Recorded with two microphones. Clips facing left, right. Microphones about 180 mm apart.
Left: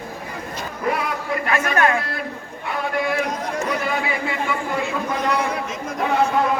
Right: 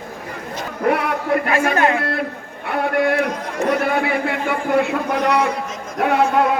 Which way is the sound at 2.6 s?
60° right (ahead or behind).